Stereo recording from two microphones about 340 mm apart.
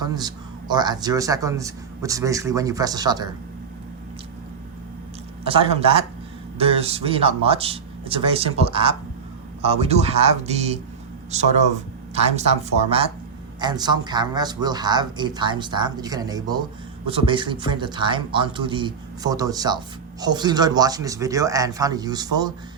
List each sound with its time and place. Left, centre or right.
0.0 s speech: centre
5.5 s speech: centre